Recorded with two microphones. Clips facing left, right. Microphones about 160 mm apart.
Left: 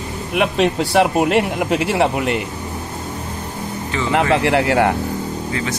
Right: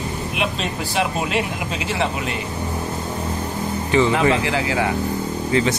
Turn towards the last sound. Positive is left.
turn(degrees=65)  # may be behind; listen again after turning